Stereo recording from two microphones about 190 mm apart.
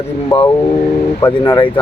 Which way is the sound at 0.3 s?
20° left (ahead or behind).